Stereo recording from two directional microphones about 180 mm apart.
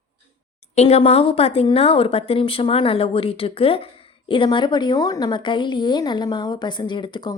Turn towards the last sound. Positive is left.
turn(degrees=25)  # may be behind; listen again after turning